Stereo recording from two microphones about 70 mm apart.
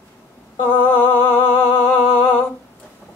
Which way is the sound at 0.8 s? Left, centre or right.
Left.